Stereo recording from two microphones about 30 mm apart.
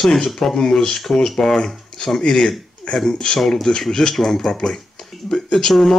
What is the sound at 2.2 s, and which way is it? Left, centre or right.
Speech, left.